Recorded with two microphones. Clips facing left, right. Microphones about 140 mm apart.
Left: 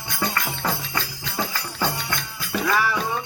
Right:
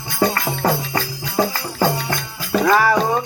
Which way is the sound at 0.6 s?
45° right (ahead or behind).